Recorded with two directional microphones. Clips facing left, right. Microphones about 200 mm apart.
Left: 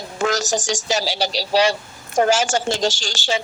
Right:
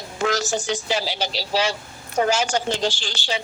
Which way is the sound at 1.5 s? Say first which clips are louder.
Left 6 dB; 70° left (ahead or behind).